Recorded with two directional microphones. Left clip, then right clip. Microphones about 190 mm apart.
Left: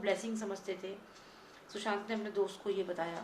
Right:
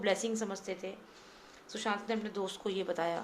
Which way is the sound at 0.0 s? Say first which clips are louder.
Right 3 dB; 50° right (ahead or behind).